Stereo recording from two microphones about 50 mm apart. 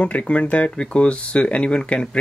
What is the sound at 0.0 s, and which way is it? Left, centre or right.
Speech, left.